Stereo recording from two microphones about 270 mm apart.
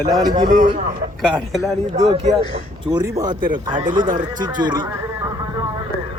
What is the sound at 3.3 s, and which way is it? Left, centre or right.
Speech, right.